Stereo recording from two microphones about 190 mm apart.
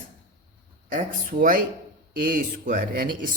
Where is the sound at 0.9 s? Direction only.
45° right (ahead or behind).